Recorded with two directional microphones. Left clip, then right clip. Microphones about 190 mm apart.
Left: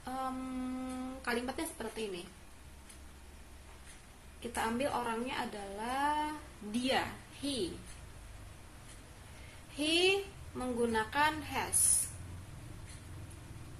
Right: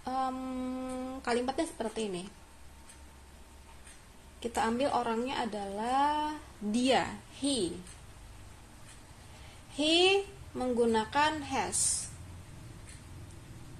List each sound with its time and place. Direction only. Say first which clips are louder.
0.0 s a sound: right 5 dB; 35° right (ahead or behind)
4.4 s a woman's voice: right 4 dB; 40° right (ahead or behind)
9.8 s a woman's voice: right 4 dB; 40° right (ahead or behind)